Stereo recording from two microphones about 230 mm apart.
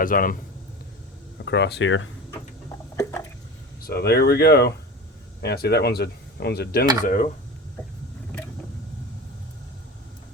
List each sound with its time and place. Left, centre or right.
0.0 s speech: left
1.5 s speech: left
2.9 s a sound: centre
3.8 s speech: left